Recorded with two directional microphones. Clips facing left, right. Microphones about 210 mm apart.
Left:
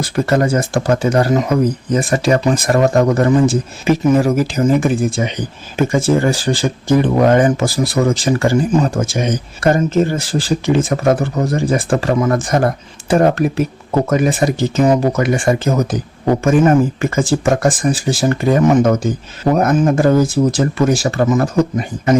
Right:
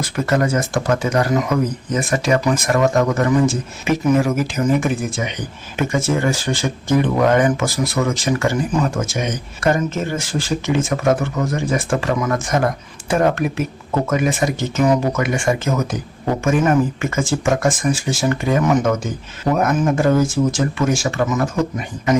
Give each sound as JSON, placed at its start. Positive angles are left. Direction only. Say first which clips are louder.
{"t": 0.0, "sound": "speech", "louder": "left 3 dB", "side_deg": 30}